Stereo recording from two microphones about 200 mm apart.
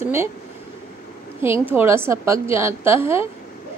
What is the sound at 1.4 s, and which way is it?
A woman's voice, 10° right (ahead or behind).